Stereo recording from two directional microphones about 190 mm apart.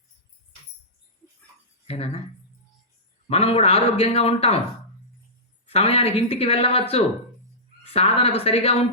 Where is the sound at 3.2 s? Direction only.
30° left (ahead or behind).